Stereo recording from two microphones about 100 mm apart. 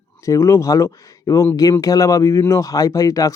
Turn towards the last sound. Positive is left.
turn(degrees=35)  # may be behind; listen again after turning